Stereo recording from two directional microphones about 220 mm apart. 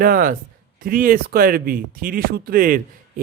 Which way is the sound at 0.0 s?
40° right (ahead or behind).